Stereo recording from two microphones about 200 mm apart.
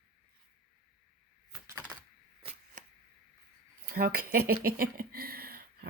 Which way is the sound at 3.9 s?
50° right (ahead or behind).